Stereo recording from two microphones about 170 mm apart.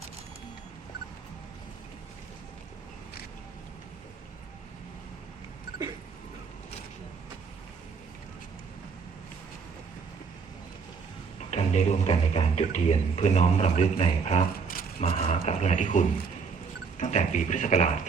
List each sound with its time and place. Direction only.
11.5 s speech: 40° left (ahead or behind)